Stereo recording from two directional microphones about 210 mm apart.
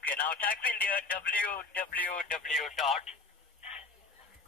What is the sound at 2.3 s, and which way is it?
Mantra, centre (ahead or behind).